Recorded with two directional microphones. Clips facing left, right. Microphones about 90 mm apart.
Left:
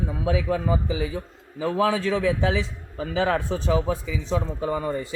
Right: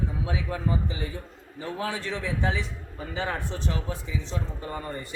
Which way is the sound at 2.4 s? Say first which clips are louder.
Left 5 dB; 90° left.